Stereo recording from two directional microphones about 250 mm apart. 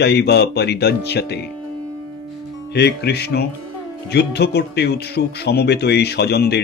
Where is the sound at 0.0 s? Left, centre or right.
Left.